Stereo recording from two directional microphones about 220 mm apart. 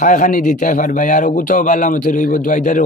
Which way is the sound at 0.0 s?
35° left (ahead or behind).